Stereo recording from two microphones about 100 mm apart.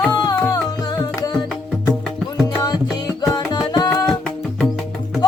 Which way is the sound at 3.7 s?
40° left (ahead or behind).